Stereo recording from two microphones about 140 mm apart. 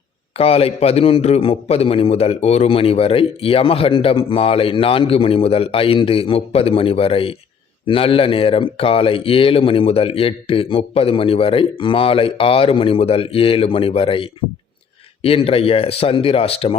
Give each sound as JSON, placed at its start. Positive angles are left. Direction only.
{"t": 0.3, "sound": "a man's voice", "side_deg": 45}